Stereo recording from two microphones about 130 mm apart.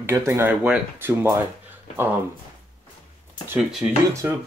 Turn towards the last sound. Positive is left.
turn(degrees=-15)  # may be behind; listen again after turning